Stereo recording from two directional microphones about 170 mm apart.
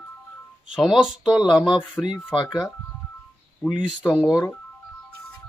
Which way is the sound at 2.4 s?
25° left (ahead or behind).